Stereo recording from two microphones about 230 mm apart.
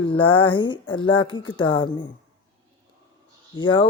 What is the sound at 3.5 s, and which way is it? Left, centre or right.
Speech, centre.